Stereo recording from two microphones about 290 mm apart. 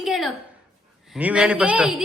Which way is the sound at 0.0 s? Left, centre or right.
Centre.